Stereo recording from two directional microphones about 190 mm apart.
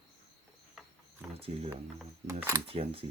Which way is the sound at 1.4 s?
30° right (ahead or behind).